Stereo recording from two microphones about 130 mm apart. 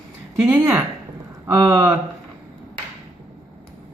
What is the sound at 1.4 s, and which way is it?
Speech, 25° right (ahead or behind).